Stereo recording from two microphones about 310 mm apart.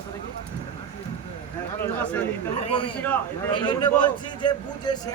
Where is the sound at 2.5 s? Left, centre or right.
Centre.